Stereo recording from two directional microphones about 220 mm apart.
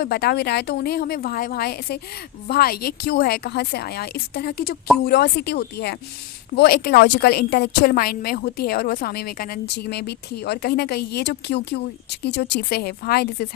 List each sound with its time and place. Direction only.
0.0 s a woman's voice: 45° left (ahead or behind)